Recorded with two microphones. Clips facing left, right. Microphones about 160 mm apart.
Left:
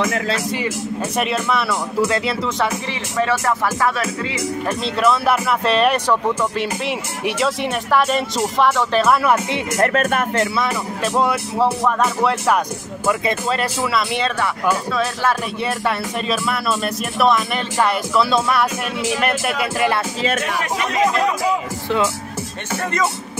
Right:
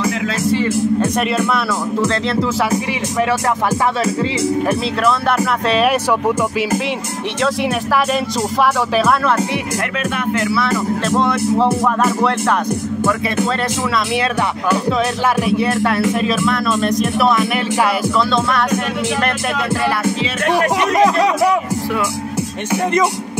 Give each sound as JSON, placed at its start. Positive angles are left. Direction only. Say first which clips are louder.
{"t": 4.0, "sound": "speech", "louder": "right 6 dB", "side_deg": -30}
{"t": 5.7, "sound": "speech", "louder": "right 1 dB", "side_deg": -5}
{"t": 7.4, "sound": "speech", "louder": "right 6 dB", "side_deg": 0}
{"t": 9.9, "sound": "speech", "louder": "left 1 dB", "side_deg": 45}
{"t": 10.4, "sound": "speech", "louder": "right 3 dB", "side_deg": 20}
{"t": 11.8, "sound": "speech", "louder": "right 3 dB", "side_deg": -5}
{"t": 15.5, "sound": "speech", "louder": "right 6 dB", "side_deg": 0}
{"t": 20.4, "sound": "speech", "louder": "right 7 dB", "side_deg": -70}